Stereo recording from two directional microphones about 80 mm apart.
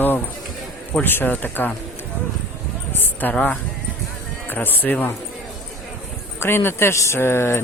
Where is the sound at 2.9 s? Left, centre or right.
Left.